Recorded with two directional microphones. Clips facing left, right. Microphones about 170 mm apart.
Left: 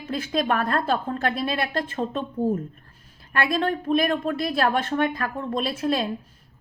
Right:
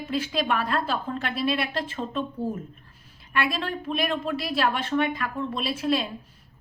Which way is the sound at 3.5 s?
45° left (ahead or behind).